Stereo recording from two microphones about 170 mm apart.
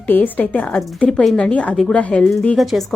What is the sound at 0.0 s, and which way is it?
A woman's voice, 10° left (ahead or behind).